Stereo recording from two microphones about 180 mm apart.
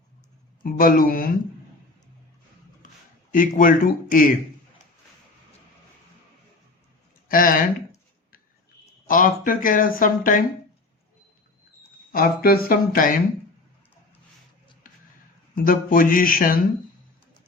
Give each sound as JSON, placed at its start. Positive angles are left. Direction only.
{"t": 0.6, "sound": "speech", "side_deg": 50}
{"t": 3.3, "sound": "speech", "side_deg": 50}
{"t": 7.3, "sound": "speech", "side_deg": 50}
{"t": 9.0, "sound": "speech", "side_deg": 50}
{"t": 12.1, "sound": "speech", "side_deg": 55}
{"t": 15.5, "sound": "speech", "side_deg": 50}